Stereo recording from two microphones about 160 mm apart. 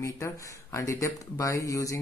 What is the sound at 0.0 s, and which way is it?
Speech, 20° left (ahead or behind).